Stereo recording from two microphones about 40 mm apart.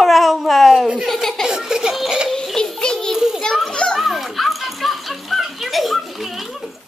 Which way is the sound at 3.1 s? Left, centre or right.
Centre.